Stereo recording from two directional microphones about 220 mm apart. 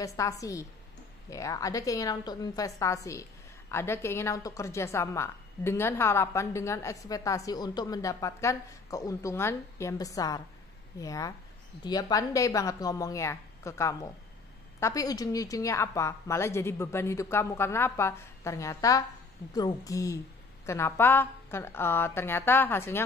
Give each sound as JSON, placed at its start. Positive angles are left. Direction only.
{"t": 0.0, "sound": "a woman's voice", "side_deg": 15}